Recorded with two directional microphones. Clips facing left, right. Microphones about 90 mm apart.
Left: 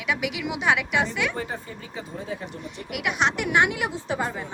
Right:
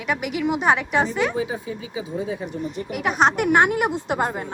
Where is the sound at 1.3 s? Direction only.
5° right (ahead or behind).